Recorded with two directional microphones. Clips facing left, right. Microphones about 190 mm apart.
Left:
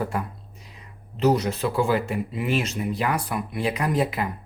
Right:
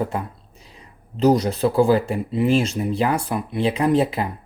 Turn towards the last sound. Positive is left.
turn(degrees=-30)  # may be behind; listen again after turning